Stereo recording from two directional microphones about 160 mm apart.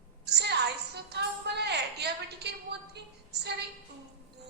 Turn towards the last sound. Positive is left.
turn(degrees=-90)